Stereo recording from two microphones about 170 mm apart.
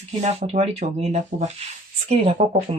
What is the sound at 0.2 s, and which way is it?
Speech, 40° right (ahead or behind).